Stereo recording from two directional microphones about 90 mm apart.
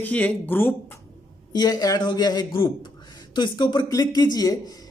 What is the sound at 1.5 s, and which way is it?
Speech, 50° left (ahead or behind).